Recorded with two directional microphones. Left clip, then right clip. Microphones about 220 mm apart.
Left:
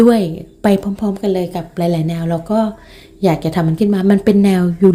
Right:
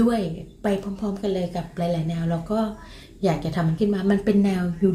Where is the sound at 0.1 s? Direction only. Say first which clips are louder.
Left 11 dB; 40° left (ahead or behind).